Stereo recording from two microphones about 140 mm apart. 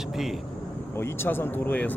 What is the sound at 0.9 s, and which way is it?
Speech, 15° left (ahead or behind).